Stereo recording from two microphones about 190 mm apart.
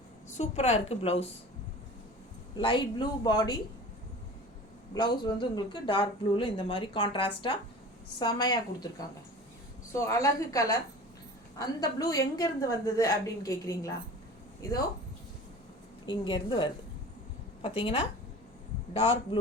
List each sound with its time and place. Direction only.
0.3 s a woman's voice: 35° left (ahead or behind)
2.6 s speech: 25° left (ahead or behind)
4.9 s speech: 25° left (ahead or behind)
9.9 s a woman's voice: 15° left (ahead or behind)
16.0 s speech: 25° left (ahead or behind)